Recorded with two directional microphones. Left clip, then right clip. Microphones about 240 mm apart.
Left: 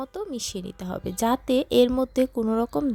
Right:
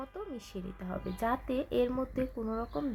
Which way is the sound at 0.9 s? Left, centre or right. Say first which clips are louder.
Left 8 dB; left.